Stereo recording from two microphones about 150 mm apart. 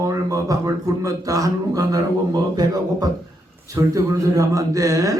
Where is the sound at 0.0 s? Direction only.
25° right (ahead or behind).